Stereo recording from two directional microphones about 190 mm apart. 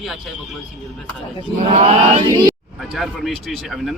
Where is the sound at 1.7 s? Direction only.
35° right (ahead or behind).